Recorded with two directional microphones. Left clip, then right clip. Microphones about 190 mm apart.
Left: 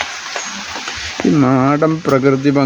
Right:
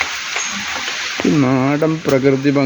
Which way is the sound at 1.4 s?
20° left (ahead or behind).